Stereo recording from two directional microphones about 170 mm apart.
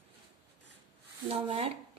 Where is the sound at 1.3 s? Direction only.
35° right (ahead or behind).